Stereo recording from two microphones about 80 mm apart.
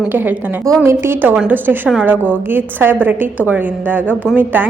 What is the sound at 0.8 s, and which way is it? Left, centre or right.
A woman's voice, right.